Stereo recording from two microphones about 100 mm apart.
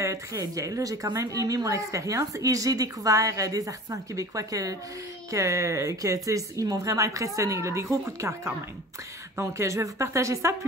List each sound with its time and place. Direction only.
0.0 s a woman's voice: 30° right (ahead or behind)